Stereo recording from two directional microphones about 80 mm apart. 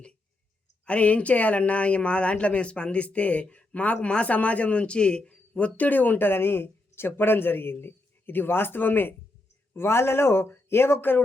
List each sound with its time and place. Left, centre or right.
0.9 s speech: centre